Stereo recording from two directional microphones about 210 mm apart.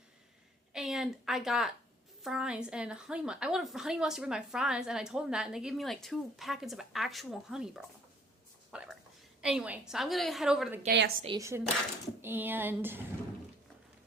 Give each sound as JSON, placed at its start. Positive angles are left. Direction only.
{"t": 0.7, "sound": "a woman's voice", "side_deg": 0}
{"t": 8.7, "sound": "a sound", "side_deg": -5}
{"t": 9.4, "sound": "a woman's voice", "side_deg": -5}
{"t": 10.8, "sound": "a woman's voice", "side_deg": -50}
{"t": 11.3, "sound": "speech", "side_deg": -15}